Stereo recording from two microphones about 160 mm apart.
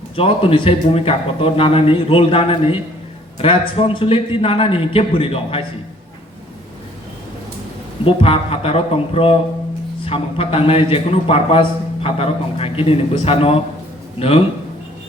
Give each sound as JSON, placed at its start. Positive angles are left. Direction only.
{"t": 0.2, "sound": "a man's voice", "side_deg": 35}
{"t": 8.0, "sound": "a man's voice", "side_deg": 35}